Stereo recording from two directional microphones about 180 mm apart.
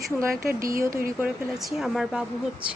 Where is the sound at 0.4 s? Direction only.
50° right (ahead or behind).